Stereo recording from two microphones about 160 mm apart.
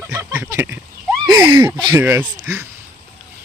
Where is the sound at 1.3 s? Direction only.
25° right (ahead or behind).